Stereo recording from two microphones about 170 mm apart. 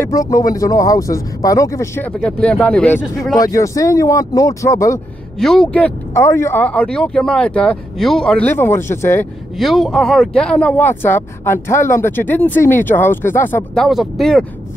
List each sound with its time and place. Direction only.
0.0 s speech: 20° left (ahead or behind); by 3.3 s centre (ahead or behind)
3.3 s speech: 20° left (ahead or behind)
5.4 s speech: 5° left (ahead or behind)
9.6 s speech: centre (ahead or behind)
13.8 s speech: centre (ahead or behind)